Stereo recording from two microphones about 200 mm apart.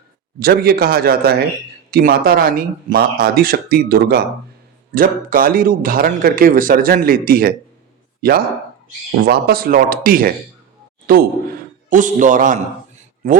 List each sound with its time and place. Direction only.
0.3 s speech: 50° right (ahead or behind)
11.0 s a sound: 45° right (ahead or behind)
11.9 s a man's voice: 40° right (ahead or behind)